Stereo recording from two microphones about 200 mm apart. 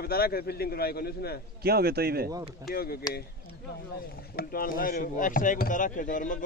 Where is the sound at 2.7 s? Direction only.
50° left (ahead or behind).